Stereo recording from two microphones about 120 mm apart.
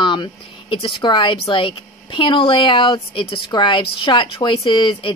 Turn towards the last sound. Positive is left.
turn(degrees=45)  # may be behind; listen again after turning